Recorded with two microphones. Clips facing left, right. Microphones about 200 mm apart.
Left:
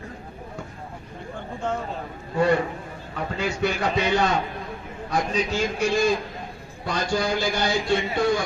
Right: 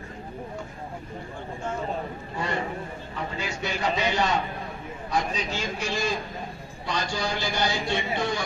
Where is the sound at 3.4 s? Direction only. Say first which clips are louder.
Left 6 dB; 60° left (ahead or behind).